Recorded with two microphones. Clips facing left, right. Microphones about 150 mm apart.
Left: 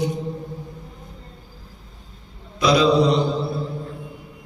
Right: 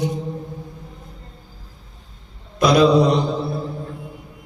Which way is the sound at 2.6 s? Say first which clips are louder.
Right 3 dB; 50° right (ahead or behind).